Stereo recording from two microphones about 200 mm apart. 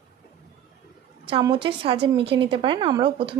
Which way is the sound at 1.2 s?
25° right (ahead or behind).